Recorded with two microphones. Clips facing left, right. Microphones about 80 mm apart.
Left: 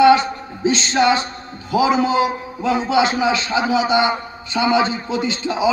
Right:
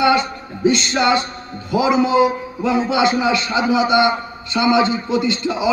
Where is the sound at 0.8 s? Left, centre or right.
Left.